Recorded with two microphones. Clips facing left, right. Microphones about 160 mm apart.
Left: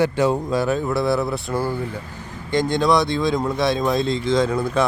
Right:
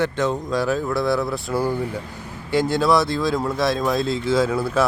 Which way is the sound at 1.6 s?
15° right (ahead or behind).